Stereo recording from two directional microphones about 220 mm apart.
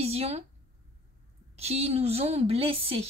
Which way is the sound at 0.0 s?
25° right (ahead or behind).